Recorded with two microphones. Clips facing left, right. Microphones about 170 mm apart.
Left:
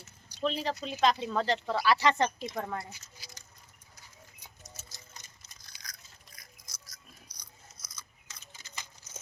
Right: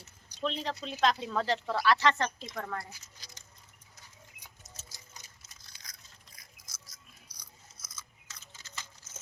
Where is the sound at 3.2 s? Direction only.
10° left (ahead or behind).